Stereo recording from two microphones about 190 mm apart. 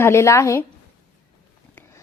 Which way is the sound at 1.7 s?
15° left (ahead or behind).